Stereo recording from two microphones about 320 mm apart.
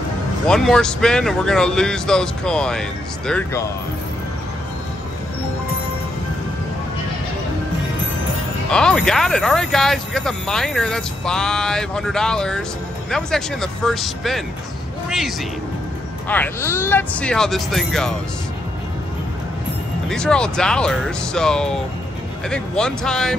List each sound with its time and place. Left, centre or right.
0.5 s speech: centre
8.6 s speech: centre
15.0 s a sound: centre
16.3 s speech: centre
20.1 s speech: centre